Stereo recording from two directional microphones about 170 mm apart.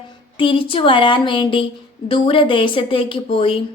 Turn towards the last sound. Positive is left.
turn(degrees=30)  # may be behind; listen again after turning